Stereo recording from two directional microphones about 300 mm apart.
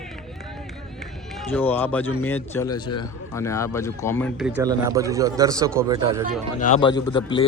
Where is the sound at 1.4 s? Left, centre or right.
Centre.